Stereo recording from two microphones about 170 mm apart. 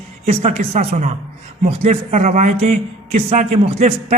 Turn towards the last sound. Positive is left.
turn(degrees=-35)  # may be behind; listen again after turning